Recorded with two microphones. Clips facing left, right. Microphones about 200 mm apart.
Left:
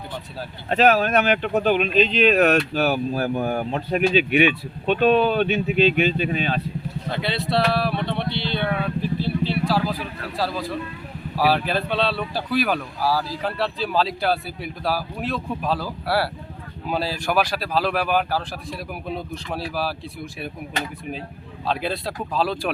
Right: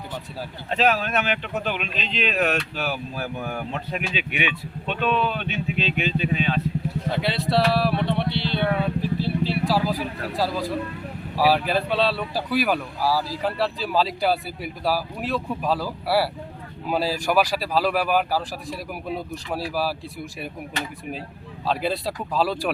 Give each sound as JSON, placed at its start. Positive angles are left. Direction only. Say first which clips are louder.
{"t": 0.7, "sound": "speech", "louder": "left 5 dB", "side_deg": 50}
{"t": 7.1, "sound": "speech", "louder": "even", "side_deg": -5}
{"t": 9.2, "sound": "vehicle", "louder": "left 1 dB", "side_deg": -10}
{"t": 11.3, "sound": "speech", "louder": "right 1 dB", "side_deg": -10}
{"t": 21.7, "sound": "speech", "louder": "right 1 dB", "side_deg": -5}